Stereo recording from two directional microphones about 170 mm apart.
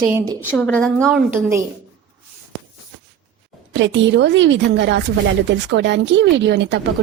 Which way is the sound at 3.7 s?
90° right.